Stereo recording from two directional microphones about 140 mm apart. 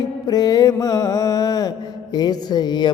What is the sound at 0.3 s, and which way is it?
Mantra, 30° left (ahead or behind).